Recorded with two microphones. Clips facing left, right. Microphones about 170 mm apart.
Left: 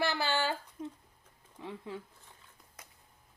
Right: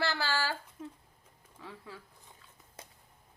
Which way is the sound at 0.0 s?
20° left (ahead or behind).